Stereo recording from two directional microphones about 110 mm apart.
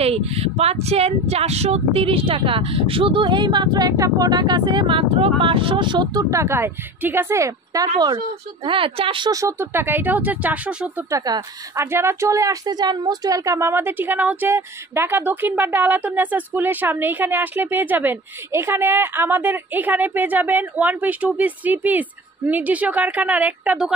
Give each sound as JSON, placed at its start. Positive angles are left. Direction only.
{"t": 0.0, "sound": "speech", "side_deg": -65}
{"t": 6.3, "sound": "speech", "side_deg": -25}
{"t": 8.6, "sound": "speech", "side_deg": -55}
{"t": 9.3, "sound": "a woman's voice", "side_deg": -30}
{"t": 11.1, "sound": "a woman's voice", "side_deg": -35}